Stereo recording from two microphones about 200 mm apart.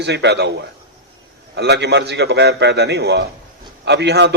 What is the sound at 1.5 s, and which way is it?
A man's voice, 55° right (ahead or behind).